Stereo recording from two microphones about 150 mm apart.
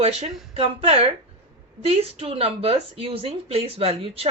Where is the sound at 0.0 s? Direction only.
40° right (ahead or behind).